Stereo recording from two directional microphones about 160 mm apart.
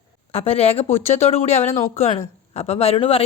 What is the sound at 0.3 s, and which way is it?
A man's voice, 40° left (ahead or behind).